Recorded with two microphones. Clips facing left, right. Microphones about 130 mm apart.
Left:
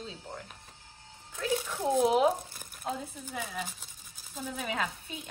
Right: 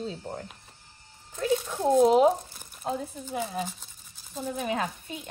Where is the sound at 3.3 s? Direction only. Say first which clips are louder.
Right 7 dB; 25° right (ahead or behind).